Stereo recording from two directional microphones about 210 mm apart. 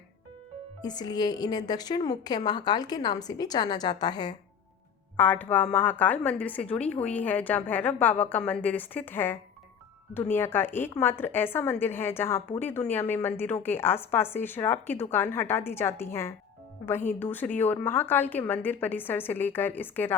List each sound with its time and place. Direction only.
0.8 s a woman's voice: 20° left (ahead or behind)
5.1 s a woman's voice: 10° left (ahead or behind)